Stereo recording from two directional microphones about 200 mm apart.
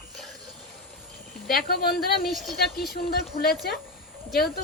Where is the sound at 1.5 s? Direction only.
50° left (ahead or behind).